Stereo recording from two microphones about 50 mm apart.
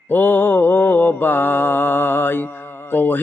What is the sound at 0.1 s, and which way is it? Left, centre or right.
Mantra, left.